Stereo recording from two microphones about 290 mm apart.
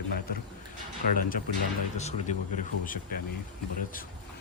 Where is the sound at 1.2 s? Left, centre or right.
Left.